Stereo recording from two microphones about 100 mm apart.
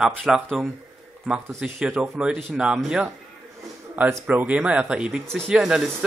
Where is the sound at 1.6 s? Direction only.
10° right (ahead or behind).